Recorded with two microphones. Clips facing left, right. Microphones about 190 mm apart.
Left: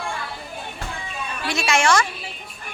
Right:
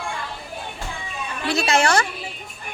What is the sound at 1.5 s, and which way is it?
Speech, 35° right (ahead or behind).